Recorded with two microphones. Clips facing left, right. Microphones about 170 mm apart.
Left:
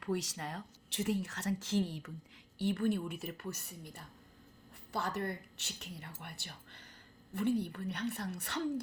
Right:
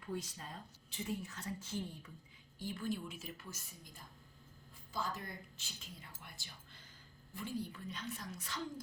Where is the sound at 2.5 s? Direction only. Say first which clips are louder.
Left 8 dB; 70° left (ahead or behind).